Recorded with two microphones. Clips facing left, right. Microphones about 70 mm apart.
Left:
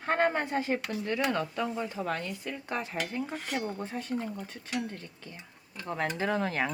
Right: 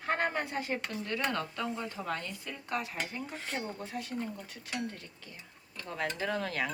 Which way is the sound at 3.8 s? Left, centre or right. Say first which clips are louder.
Left 3 dB; left.